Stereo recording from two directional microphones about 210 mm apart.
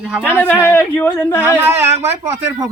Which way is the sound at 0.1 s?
5° right (ahead or behind).